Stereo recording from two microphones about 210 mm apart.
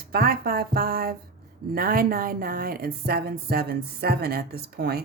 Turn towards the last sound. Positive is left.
turn(degrees=-50)  # may be behind; listen again after turning